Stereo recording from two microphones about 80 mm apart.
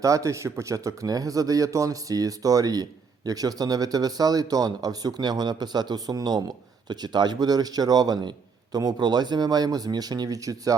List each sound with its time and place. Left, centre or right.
0.0 s speech: right